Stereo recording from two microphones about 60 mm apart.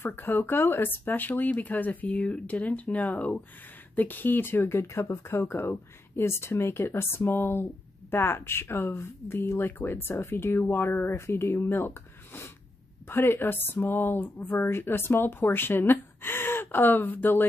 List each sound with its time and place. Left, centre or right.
0.0 s speech: left
13.1 s speech: left